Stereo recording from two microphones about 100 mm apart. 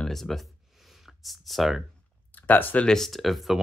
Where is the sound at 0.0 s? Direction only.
5° left (ahead or behind).